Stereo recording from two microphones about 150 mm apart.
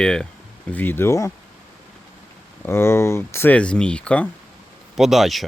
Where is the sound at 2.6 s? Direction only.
15° left (ahead or behind); by 5.4 s centre (ahead or behind).